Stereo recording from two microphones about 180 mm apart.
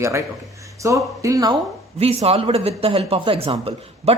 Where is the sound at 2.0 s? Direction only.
35° right (ahead or behind).